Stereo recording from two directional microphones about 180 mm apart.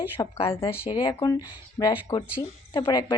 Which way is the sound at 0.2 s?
20° left (ahead or behind).